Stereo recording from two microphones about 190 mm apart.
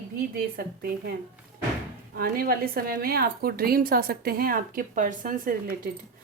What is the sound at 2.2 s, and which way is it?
A woman's voice, 50° right (ahead or behind).